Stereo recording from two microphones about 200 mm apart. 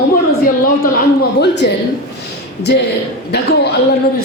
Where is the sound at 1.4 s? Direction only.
55° left (ahead or behind).